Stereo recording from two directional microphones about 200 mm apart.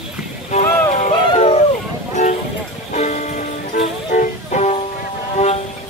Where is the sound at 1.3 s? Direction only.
30° left (ahead or behind).